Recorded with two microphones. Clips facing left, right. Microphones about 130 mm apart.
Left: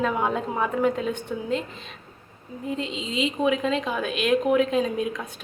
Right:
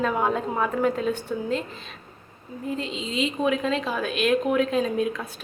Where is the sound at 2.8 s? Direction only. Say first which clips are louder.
Left 1 dB; 20° left (ahead or behind).